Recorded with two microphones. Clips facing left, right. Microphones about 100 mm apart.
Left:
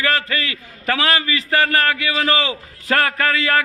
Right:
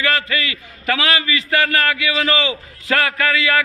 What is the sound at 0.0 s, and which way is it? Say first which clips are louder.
A man's voice: even; 35° left (ahead or behind).